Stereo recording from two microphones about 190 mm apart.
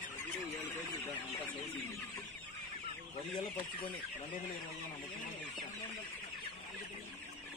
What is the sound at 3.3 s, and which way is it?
Speech, 25° left (ahead or behind).